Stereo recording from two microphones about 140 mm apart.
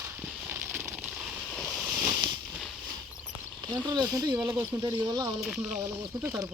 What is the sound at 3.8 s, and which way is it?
Speech, 30° right (ahead or behind).